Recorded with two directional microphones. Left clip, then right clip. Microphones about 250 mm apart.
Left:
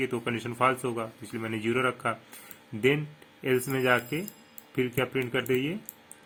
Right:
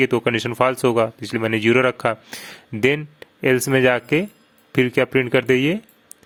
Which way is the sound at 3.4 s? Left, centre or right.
Right.